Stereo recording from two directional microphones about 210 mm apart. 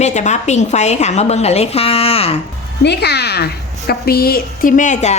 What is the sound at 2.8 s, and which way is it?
A woman's voice, 50° left (ahead or behind).